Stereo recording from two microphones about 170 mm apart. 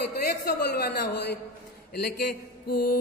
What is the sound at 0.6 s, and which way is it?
Speech, 75° left (ahead or behind).